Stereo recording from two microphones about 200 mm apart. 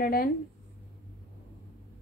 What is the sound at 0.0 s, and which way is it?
Speech, 45° left (ahead or behind).